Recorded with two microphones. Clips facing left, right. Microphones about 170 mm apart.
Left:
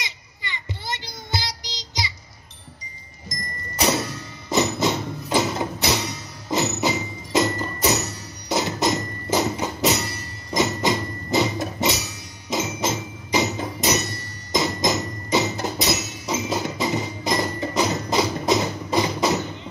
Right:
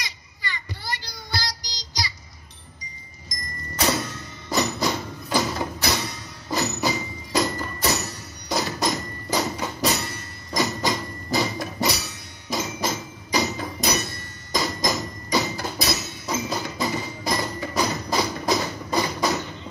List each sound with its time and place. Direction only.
0.0 s child singing: 20° left (ahead or behind)
4.5 s music: 20° left (ahead or behind)
10.5 s hammer: 20° left (ahead or behind)
12.4 s music: 20° left (ahead or behind)